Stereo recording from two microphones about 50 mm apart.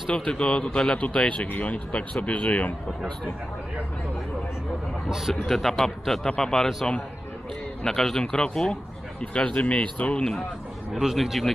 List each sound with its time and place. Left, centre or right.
0.1 s speech: centre
0.9 s speech: left
5.3 s a man's voice: centre
7.8 s speech: centre; by 10.2 s left
10.9 s a man's voice: centre